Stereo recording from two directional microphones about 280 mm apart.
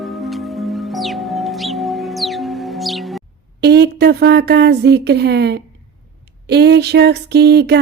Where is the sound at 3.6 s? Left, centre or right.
Right.